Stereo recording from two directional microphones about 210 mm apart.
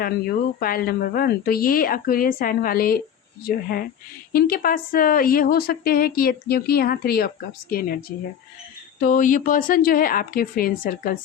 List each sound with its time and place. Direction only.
0.0 s a woman's voice: 45° left (ahead or behind)
9.0 s speech: 40° left (ahead or behind)